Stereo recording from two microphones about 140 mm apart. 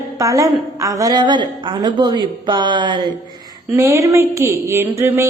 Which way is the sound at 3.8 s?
20° right (ahead or behind).